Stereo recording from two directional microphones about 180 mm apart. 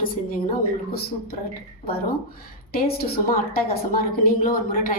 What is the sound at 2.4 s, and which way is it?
A woman's voice, 60° left (ahead or behind).